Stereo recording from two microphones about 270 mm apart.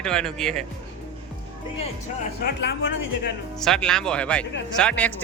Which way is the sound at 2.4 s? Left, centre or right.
Left.